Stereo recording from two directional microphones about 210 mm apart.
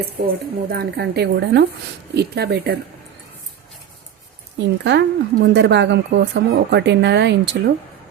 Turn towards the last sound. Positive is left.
turn(degrees=-55)  # may be behind; listen again after turning